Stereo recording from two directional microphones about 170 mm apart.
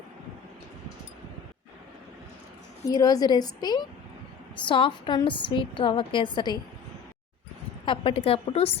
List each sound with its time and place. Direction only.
2.9 s a woman's voice: 20° left (ahead or behind)
7.9 s a woman's voice: 30° left (ahead or behind)